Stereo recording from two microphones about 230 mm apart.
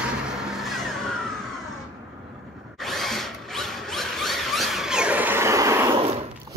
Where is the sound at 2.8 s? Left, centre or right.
Centre.